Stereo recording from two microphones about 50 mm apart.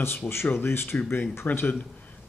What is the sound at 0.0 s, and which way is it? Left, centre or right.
Speech, left.